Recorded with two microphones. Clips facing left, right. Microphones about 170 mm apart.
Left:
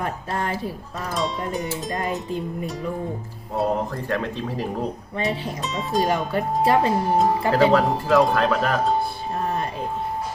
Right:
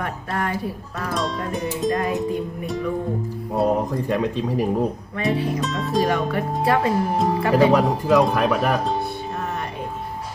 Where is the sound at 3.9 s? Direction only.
15° right (ahead or behind).